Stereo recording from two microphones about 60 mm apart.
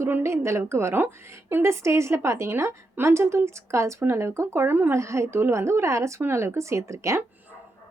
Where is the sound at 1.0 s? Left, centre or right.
Right.